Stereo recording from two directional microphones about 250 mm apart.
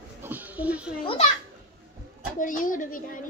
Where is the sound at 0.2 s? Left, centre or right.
Centre.